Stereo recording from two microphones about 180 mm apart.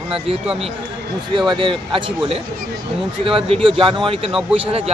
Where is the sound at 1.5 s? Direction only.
25° right (ahead or behind).